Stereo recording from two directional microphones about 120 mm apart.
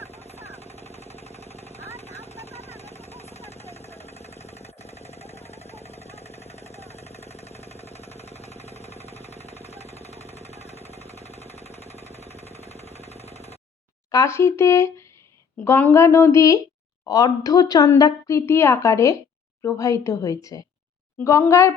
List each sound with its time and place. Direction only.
0.3 s vehicle: 60° left (ahead or behind)
3.3 s jackhammer: 60° left (ahead or behind)
12.7 s a sound: 60° left (ahead or behind)
14.1 s a woman's voice: 25° left (ahead or behind)